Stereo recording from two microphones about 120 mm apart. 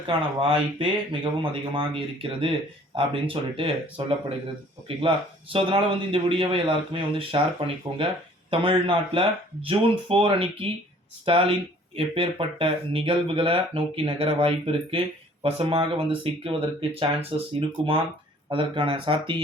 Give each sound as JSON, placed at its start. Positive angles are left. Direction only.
{"t": 0.1, "sound": "a man's voice", "side_deg": -45}